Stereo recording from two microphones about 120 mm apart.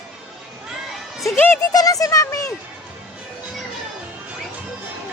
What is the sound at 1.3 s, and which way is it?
Speech, 15° left (ahead or behind).